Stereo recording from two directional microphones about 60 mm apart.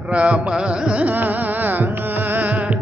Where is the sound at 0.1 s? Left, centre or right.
Centre.